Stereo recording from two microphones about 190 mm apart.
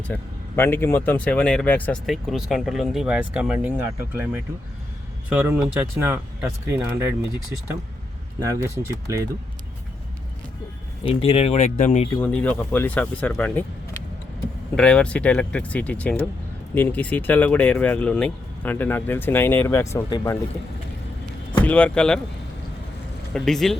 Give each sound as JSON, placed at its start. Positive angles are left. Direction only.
{"t": 0.1, "sound": "speech", "side_deg": 10}
{"t": 8.4, "sound": "speech", "side_deg": -15}
{"t": 11.0, "sound": "speech", "side_deg": 30}
{"t": 12.2, "sound": "speech", "side_deg": 5}
{"t": 14.8, "sound": "speech", "side_deg": 5}
{"t": 21.6, "sound": "speech", "side_deg": 10}
{"t": 23.3, "sound": "speech", "side_deg": 0}